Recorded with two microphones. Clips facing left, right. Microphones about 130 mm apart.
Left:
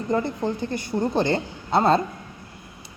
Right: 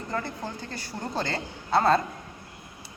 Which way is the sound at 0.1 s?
20° left (ahead or behind).